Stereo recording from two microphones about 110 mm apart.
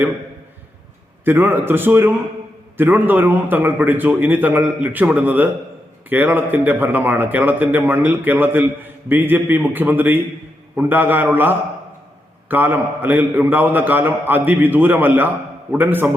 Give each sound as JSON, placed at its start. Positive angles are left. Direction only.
{"t": 1.2, "sound": "a man's voice", "side_deg": -20}